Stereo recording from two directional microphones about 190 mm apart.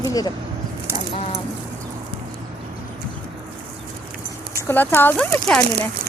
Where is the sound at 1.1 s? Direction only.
30° left (ahead or behind).